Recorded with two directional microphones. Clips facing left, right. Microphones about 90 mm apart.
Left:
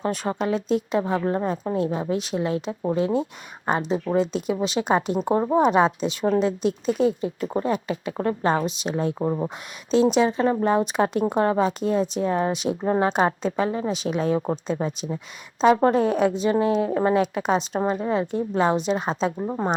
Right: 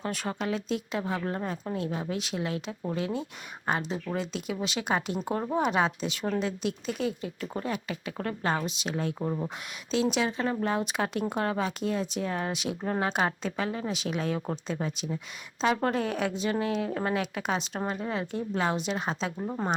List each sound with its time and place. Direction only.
0.0 s speech: 30° left (ahead or behind)
9.1 s speech: 60° left (ahead or behind)
9.9 s speech: 30° left (ahead or behind)